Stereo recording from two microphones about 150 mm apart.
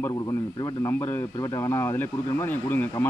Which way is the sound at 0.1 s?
25° left (ahead or behind).